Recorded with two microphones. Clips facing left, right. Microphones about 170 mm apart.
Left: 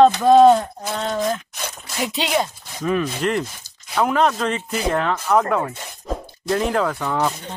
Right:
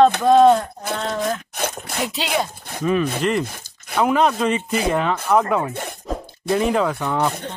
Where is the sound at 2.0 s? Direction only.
Centre (ahead or behind).